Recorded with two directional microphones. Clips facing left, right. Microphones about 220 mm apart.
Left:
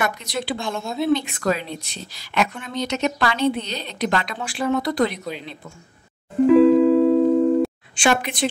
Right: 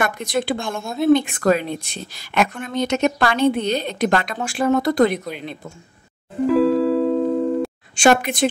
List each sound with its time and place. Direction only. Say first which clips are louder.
0.0 s a woman's voice: right 4 dB; 50° right (ahead or behind)
6.4 s music: left 4 dB; centre (ahead or behind)
7.9 s a woman's voice: right 9 dB; 45° right (ahead or behind)